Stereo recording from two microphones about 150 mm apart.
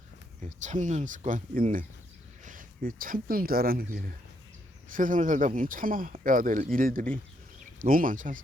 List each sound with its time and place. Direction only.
0.4 s speech: 55° right (ahead or behind); by 4.1 s 80° right
4.9 s speech: 60° right (ahead or behind)